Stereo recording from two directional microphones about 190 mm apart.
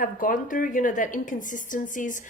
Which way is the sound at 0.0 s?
45° left (ahead or behind).